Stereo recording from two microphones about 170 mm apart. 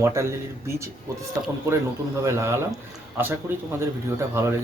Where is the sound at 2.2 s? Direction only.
15° right (ahead or behind).